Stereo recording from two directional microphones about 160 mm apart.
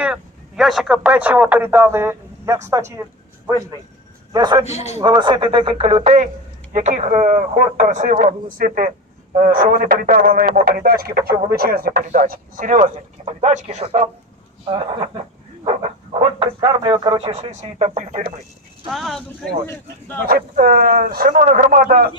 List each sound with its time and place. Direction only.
0.0 s speech: 5° right (ahead or behind)
4.3 s speech: 25° right (ahead or behind)
4.6 s a man's voice: 40° left (ahead or behind)
4.9 s speech: 30° right (ahead or behind)
6.7 s speech: 50° right (ahead or behind)
15.6 s a sound: 35° right (ahead or behind)
16.6 s speech: 25° right (ahead or behind)
17.2 s speech: 40° right (ahead or behind)
18.9 s speech: centre (ahead or behind)
20.2 s speech: 70° right (ahead or behind)
21.2 s speech: 55° right (ahead or behind)